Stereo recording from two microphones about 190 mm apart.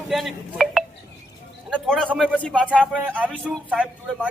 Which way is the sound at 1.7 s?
5° left (ahead or behind).